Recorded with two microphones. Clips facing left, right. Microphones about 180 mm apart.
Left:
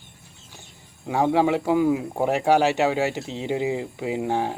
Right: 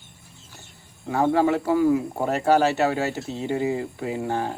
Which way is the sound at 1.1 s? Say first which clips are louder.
Even; 15° left (ahead or behind).